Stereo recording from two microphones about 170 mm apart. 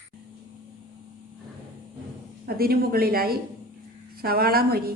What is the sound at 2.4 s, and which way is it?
A woman's voice, 60° right (ahead or behind).